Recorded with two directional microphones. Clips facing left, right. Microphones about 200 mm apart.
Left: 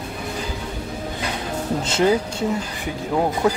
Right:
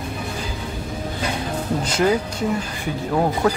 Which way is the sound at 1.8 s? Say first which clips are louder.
Left 1 dB; 25° left (ahead or behind).